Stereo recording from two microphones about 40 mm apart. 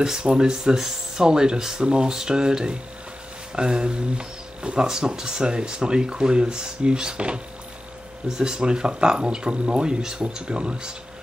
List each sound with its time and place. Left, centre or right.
0.0 s speech: right